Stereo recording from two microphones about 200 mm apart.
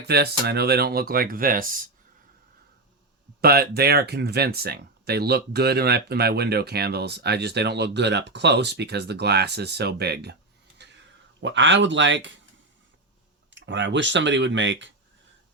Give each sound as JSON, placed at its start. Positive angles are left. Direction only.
{"t": 0.1, "sound": "speech", "side_deg": -50}
{"t": 3.4, "sound": "speech", "side_deg": -50}
{"t": 10.8, "sound": "a sound", "side_deg": -60}
{"t": 11.3, "sound": "speech", "side_deg": -65}
{"t": 13.5, "sound": "speech", "side_deg": -65}